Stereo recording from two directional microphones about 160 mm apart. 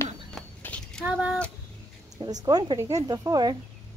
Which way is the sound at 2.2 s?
25° right (ahead or behind).